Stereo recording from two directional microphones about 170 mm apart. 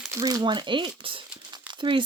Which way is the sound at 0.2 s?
20° right (ahead or behind).